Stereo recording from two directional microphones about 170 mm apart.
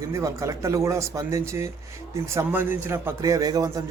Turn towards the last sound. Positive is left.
turn(degrees=-20)  # may be behind; listen again after turning